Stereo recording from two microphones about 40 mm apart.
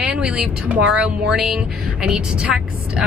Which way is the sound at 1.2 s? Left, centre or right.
Centre.